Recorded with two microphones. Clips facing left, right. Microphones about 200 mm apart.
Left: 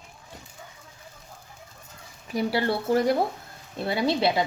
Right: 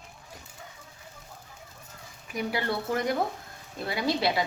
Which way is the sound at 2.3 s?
35° left (ahead or behind).